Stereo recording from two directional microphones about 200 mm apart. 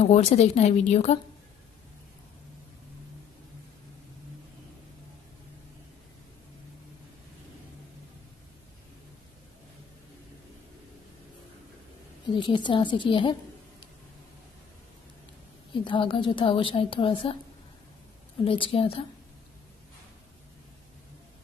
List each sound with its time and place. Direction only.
0.0 s speech: 35° left (ahead or behind)
12.4 s a woman's voice: 25° left (ahead or behind)
15.7 s a woman's voice: 25° left (ahead or behind)
18.4 s a woman's voice: 25° left (ahead or behind)